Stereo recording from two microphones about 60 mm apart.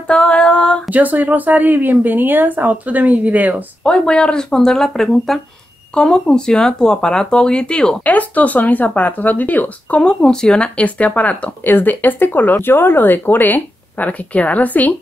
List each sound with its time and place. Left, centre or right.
0.0 s a sound: centre
0.8 s speech: right
3.8 s speech: centre
8.0 s speech: left
10.2 s speech: centre; by 15.0 s left